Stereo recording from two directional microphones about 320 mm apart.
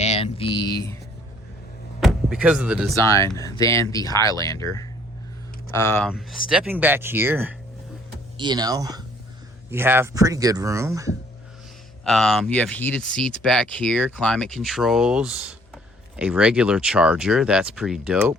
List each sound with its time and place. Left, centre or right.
0.0 s a sound: centre
2.0 s speech: centre
2.9 s speech: centre